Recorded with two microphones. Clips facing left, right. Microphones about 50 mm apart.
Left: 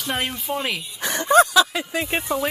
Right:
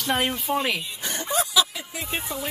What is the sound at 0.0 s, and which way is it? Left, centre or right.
Speech, centre.